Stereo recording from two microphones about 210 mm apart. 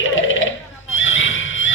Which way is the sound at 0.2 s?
65° left (ahead or behind).